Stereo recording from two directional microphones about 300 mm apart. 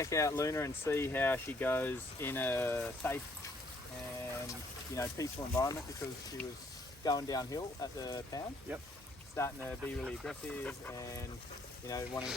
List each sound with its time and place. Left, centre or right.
0.0 s speech: centre
4.9 s speech: centre
7.0 s speech: centre